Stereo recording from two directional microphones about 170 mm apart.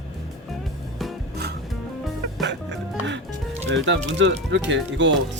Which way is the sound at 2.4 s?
90° right.